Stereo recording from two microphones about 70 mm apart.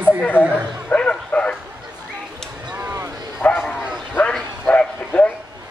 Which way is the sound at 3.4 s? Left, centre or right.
Left.